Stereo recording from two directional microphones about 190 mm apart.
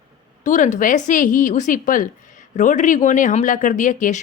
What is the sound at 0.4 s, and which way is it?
Speech, 40° left (ahead or behind).